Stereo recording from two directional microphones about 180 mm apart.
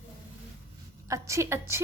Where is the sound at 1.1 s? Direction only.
15° right (ahead or behind).